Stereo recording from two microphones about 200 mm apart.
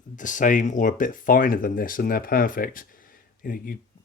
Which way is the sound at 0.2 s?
40° left (ahead or behind).